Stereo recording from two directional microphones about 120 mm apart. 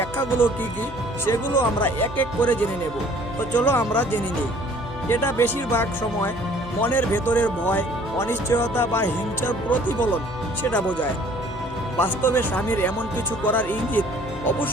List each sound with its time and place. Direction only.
0.0 s music: 20° left (ahead or behind)
1.3 s speech: 20° left (ahead or behind)